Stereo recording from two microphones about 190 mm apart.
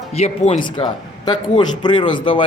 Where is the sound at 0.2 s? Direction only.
35° left (ahead or behind).